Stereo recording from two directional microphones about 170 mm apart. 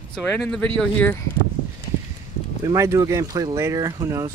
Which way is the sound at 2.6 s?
20° right (ahead or behind).